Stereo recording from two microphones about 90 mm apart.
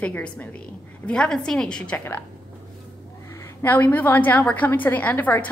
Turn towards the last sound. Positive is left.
turn(degrees=20)  # may be behind; listen again after turning